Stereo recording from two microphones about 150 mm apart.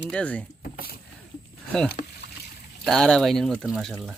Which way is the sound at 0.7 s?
90° left.